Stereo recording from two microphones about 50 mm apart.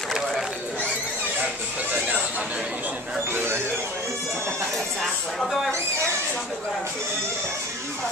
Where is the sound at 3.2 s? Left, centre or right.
Right.